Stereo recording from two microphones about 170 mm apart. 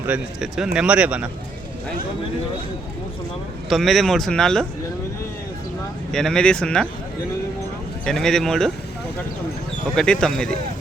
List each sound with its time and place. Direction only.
0.1 s speech: 5° right (ahead or behind)
3.7 s speech: centre (ahead or behind)
6.1 s speech: 5° left (ahead or behind)
8.0 s speech: 5° left (ahead or behind)
9.9 s speech: 5° left (ahead or behind)